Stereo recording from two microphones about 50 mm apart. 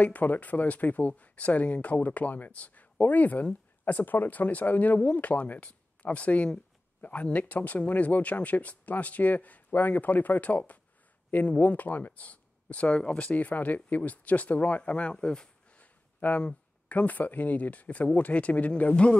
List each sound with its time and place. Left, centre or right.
0.0 s speech: left; by 15.8 s centre
15.8 s a sound: left
16.9 s speech: left